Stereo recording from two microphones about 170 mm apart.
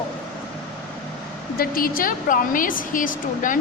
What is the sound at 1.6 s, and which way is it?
A woman's voice, 55° left (ahead or behind).